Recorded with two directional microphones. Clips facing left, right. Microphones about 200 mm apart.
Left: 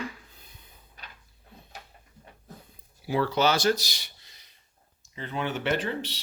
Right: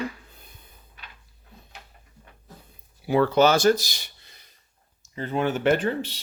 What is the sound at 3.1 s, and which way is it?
Speech, 55° right (ahead or behind).